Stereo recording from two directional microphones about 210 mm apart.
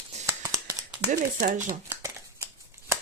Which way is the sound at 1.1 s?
40° right (ahead or behind).